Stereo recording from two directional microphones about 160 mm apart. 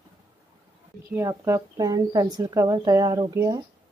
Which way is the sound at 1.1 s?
15° right (ahead or behind).